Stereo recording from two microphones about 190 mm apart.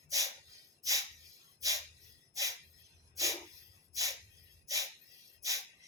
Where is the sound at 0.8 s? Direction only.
15° right (ahead or behind).